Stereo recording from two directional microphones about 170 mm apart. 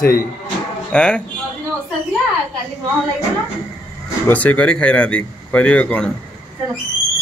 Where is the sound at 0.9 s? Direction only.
5° left (ahead or behind).